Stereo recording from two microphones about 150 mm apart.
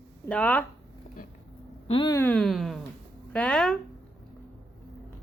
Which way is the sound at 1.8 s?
35° left (ahead or behind).